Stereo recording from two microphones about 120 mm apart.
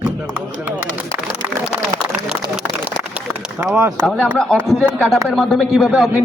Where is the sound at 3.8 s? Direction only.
25° right (ahead or behind).